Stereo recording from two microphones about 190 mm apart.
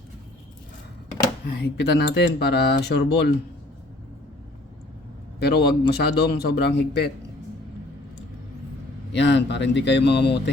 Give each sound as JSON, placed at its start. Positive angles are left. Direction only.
{"t": 1.5, "sound": "speech", "side_deg": 60}
{"t": 5.4, "sound": "speech", "side_deg": 60}
{"t": 9.1, "sound": "speech", "side_deg": 65}